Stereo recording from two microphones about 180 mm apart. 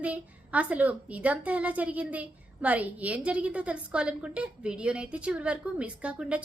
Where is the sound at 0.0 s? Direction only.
10° right (ahead or behind).